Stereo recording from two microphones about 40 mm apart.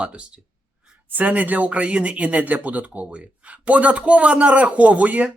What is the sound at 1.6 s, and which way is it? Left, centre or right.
Speech, right.